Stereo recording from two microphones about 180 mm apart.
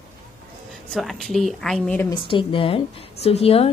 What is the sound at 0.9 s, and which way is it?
A woman's voice, centre (ahead or behind).